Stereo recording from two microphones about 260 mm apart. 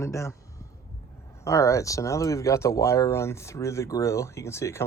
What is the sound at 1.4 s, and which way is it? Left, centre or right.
Speech, centre.